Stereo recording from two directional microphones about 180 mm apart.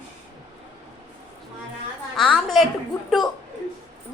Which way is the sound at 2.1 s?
Centre (ahead or behind).